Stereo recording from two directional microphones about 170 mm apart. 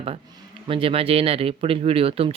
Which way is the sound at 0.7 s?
35° right (ahead or behind).